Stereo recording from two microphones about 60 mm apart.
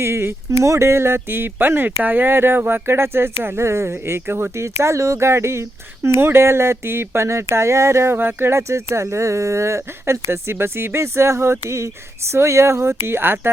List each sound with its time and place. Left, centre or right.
0.0 s speech: right